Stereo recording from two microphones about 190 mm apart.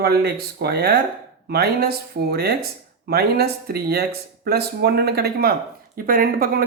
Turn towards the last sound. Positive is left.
turn(degrees=-50)  # may be behind; listen again after turning